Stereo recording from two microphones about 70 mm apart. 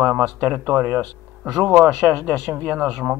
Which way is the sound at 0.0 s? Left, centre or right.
Right.